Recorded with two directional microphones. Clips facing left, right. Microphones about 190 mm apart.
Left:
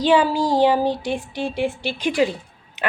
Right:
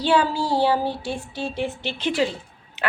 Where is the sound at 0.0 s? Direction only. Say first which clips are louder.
Left 3 dB; 15° left (ahead or behind).